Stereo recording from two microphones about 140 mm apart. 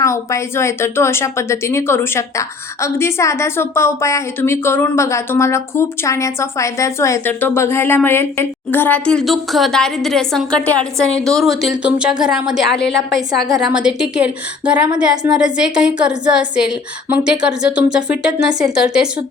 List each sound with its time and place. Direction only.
0.0 s a woman's voice: 20° left (ahead or behind); by 19.0 s 5° right (ahead or behind)